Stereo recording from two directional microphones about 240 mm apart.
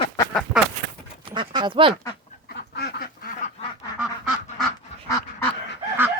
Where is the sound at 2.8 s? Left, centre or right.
Left.